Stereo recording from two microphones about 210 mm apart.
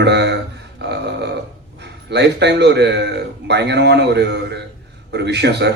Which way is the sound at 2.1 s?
55° right (ahead or behind).